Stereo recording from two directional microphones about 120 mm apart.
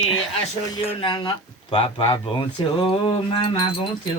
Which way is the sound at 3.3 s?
50° left (ahead or behind).